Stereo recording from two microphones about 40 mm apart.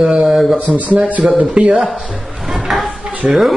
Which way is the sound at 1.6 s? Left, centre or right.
Right.